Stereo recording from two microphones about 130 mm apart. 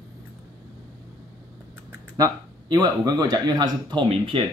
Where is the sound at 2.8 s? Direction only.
30° right (ahead or behind).